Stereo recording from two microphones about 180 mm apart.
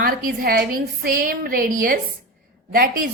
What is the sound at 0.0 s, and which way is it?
A woman's voice, 50° right (ahead or behind).